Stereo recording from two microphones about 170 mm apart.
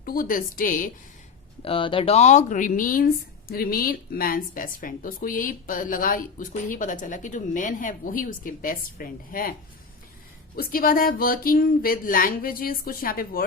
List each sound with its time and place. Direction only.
0.0 s speech: 55° left (ahead or behind)
1.6 s speech: 30° left (ahead or behind); by 9.5 s 55° left (ahead or behind)
10.5 s speech: 60° left (ahead or behind)